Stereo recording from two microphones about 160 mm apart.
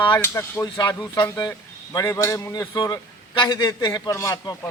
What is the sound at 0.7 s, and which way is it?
A man's voice, 30° left (ahead or behind).